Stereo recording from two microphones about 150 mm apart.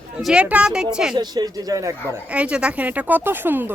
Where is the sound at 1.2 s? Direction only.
25° right (ahead or behind).